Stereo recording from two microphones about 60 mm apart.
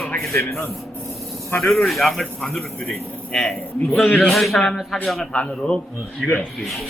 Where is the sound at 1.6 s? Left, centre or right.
Centre.